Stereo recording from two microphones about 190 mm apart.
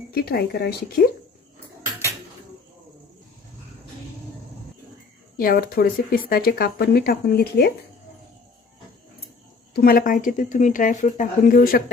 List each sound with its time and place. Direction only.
0.1 s speech: 55° left (ahead or behind)
5.4 s speech: 50° left (ahead or behind)
9.7 s speech: 50° left (ahead or behind)